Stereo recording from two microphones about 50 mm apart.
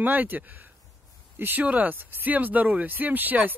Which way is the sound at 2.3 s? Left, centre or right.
Right.